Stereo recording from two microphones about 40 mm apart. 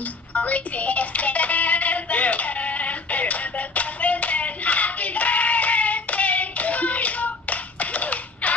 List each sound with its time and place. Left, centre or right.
0.3 s music: left